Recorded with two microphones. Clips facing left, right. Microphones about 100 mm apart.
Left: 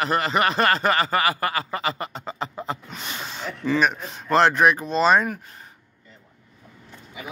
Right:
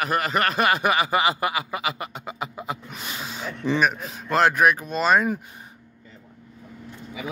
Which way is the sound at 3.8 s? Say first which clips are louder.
Even; 5° right (ahead or behind).